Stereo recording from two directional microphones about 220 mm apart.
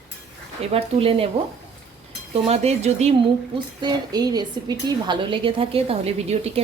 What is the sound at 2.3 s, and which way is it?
Speech, 30° right (ahead or behind).